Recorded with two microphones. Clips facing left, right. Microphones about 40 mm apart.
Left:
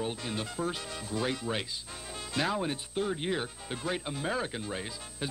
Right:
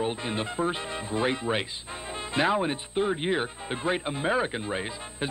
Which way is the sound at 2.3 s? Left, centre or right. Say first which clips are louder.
Right 6 dB; right.